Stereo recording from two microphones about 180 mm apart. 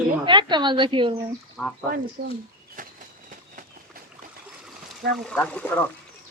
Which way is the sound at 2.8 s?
50° right (ahead or behind).